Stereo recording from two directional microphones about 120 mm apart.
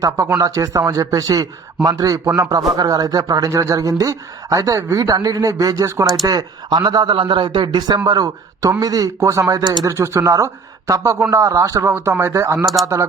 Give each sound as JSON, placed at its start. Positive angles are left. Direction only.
{"t": 0.3, "sound": "speech", "side_deg": -30}
{"t": 12.8, "sound": "speech", "side_deg": 0}